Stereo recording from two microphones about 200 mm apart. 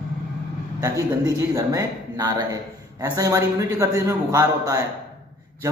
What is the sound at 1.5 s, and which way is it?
A man's voice, 15° right (ahead or behind).